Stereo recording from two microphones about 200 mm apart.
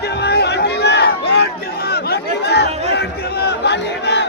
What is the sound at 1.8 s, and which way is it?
Chatter, 55° left (ahead or behind).